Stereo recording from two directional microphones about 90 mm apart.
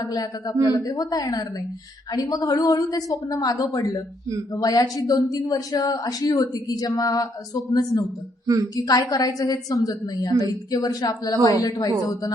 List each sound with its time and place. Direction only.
0.0 s a woman's voice: 45° left (ahead or behind)